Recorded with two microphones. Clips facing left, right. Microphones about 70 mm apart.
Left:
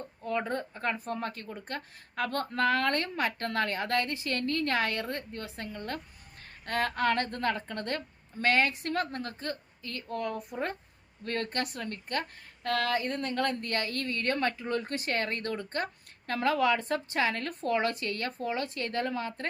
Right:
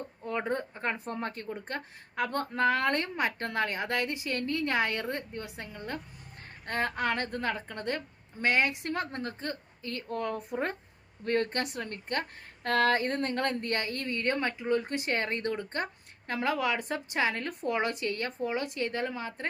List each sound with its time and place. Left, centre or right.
0.3 s speech: right